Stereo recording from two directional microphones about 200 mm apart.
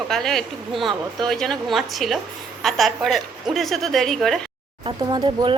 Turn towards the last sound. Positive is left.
turn(degrees=-20)  # may be behind; listen again after turning